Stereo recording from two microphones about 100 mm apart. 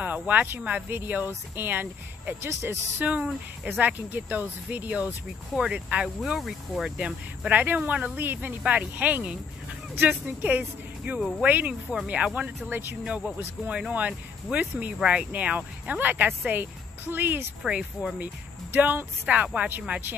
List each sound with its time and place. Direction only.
0.0 s speech: 15° right (ahead or behind)
11.1 s speech: 5° left (ahead or behind)
11.4 s speech: 15° right (ahead or behind)
17.6 s speech: 5° right (ahead or behind)
18.7 s speech: 20° right (ahead or behind)